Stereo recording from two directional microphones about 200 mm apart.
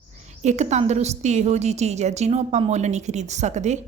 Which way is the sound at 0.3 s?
35° right (ahead or behind).